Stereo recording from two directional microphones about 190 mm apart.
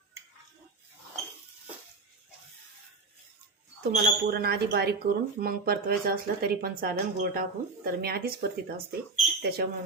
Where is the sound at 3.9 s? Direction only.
55° right (ahead or behind).